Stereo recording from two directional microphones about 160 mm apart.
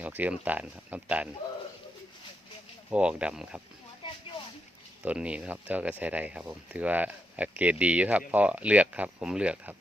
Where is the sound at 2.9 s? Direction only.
5° right (ahead or behind).